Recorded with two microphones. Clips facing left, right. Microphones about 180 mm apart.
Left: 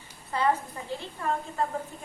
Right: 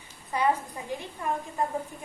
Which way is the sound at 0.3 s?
15° right (ahead or behind).